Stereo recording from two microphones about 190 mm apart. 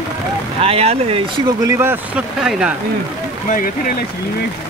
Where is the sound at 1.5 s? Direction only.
15° right (ahead or behind).